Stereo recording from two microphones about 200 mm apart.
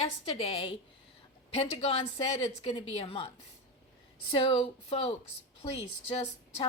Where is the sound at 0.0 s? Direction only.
30° left (ahead or behind).